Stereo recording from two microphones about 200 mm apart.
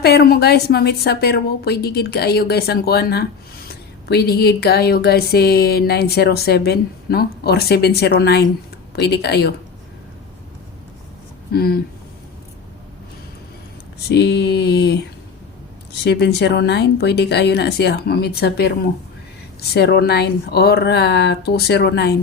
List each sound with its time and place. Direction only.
0.0 s a woman's voice: 50° left (ahead or behind)
11.5 s a woman's voice: 50° left (ahead or behind)
14.1 s speech: 55° left (ahead or behind)
16.0 s speech: 55° left (ahead or behind)
19.7 s speech: 55° left (ahead or behind)